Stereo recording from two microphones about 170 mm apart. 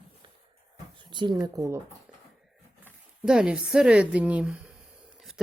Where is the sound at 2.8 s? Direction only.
5° right (ahead or behind).